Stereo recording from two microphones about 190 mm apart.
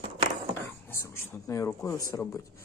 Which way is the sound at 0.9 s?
15° left (ahead or behind).